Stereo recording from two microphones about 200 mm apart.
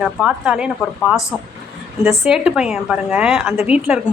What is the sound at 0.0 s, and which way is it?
A woman's voice, 5° right (ahead or behind).